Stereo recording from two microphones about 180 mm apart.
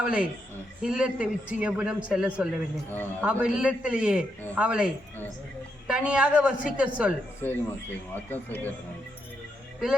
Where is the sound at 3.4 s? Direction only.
5° right (ahead or behind).